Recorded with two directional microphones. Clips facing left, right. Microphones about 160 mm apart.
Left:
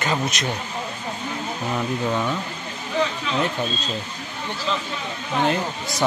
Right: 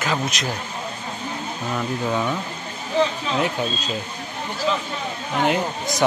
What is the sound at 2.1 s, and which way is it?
Speech, 5° right (ahead or behind).